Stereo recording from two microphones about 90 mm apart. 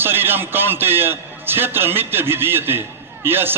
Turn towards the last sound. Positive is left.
turn(degrees=-25)  # may be behind; listen again after turning